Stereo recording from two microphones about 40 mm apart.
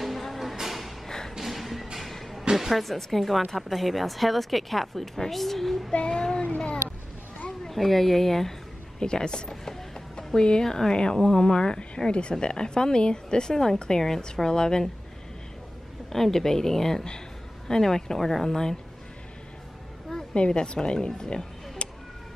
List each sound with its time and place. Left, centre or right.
0.0 s music: centre
1.0 s a sound: centre
1.4 s music: centre
2.0 s a sound: centre
2.5 s a woman's voice: centre
5.9 s child singing: left
7.7 s a woman's voice: centre
9.0 s a woman's voice: centre
16.1 s a woman's voice: centre
20.3 s speech: left